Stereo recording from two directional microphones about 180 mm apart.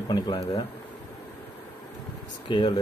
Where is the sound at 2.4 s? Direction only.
25° left (ahead or behind).